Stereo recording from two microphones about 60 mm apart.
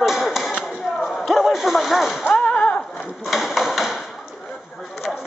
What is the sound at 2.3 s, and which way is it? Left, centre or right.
Whip, centre.